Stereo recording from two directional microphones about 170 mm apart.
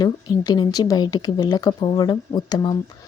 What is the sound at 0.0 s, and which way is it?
A woman's voice, 25° left (ahead or behind).